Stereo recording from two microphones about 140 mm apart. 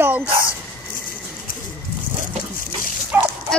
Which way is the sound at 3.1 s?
15° right (ahead or behind).